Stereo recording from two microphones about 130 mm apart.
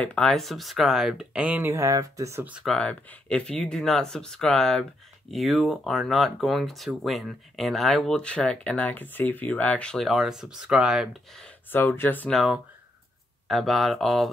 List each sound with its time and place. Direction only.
0.0 s speech: 5° left (ahead or behind); by 1.7 s 10° right (ahead or behind)
1.7 s speech: 25° right (ahead or behind)
2.5 s speech: centre (ahead or behind)
11.7 s speech: 15° left (ahead or behind)
12.3 s speech: centre (ahead or behind)